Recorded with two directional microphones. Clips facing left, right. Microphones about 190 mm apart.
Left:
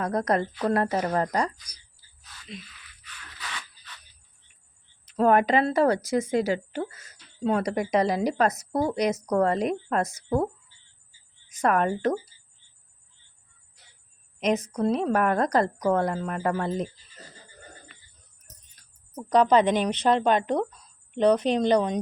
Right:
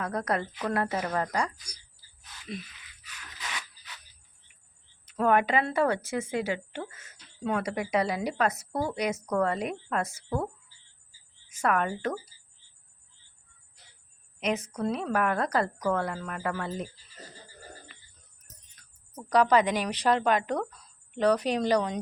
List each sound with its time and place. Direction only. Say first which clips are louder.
0.0 s a woman's voice: left 5 dB; 40° left (ahead or behind)
5.0 s a woman's voice: left 4 dB; 35° left (ahead or behind)
11.4 s a woman's voice: left 4 dB; 40° left (ahead or behind)
12.3 s a sound: even; 35° right (ahead or behind)
14.4 s a woman's voice: left 5 dB; 40° left (ahead or behind)
19.1 s a woman's voice: left 3 dB; 25° left (ahead or behind)